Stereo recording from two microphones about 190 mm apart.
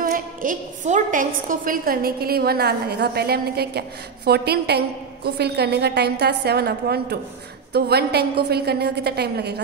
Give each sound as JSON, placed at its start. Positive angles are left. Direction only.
{"t": 0.0, "sound": "a woman's voice", "side_deg": -45}